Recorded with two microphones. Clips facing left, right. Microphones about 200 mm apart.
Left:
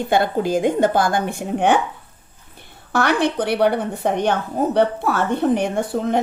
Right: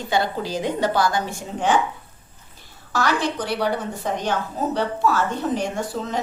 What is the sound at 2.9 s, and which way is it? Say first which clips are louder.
A woman's voice: left 4 dB; 60° left (ahead or behind).